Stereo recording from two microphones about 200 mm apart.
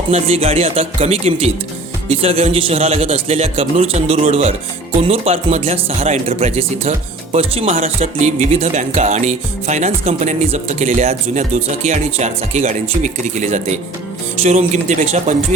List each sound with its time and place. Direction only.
0.1 s a man's voice: 30° right (ahead or behind)